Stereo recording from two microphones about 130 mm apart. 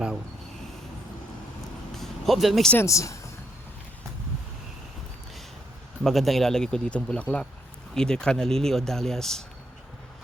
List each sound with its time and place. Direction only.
2.0 s vehicle: centre (ahead or behind)
2.7 s speech: 25° left (ahead or behind)
6.0 s speech: centre (ahead or behind)